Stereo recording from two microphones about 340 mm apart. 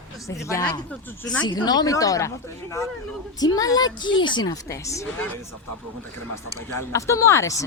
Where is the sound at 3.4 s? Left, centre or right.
Centre.